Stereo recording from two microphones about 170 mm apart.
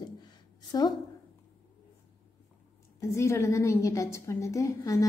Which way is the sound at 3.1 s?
15° left (ahead or behind).